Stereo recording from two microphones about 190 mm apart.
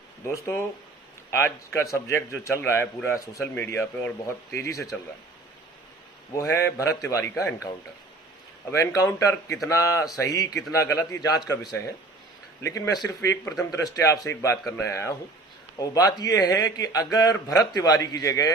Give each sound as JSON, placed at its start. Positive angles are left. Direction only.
{"t": 1.3, "sound": "speech", "side_deg": 15}
{"t": 6.3, "sound": "a man's voice", "side_deg": 15}